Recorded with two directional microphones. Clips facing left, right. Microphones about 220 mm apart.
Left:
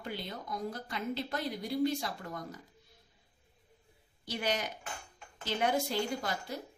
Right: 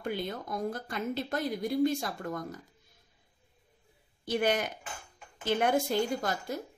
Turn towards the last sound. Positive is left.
turn(degrees=-50)  # may be behind; listen again after turning